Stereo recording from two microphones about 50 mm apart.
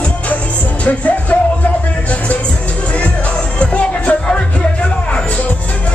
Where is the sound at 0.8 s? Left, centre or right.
Left.